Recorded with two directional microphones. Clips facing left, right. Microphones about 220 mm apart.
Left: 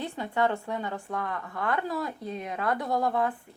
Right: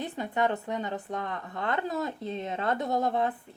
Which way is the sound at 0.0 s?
20° right (ahead or behind).